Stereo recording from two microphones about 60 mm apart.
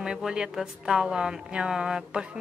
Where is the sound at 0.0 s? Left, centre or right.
Centre.